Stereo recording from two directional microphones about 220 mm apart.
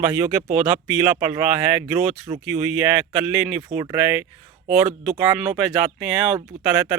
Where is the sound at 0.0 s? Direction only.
10° right (ahead or behind).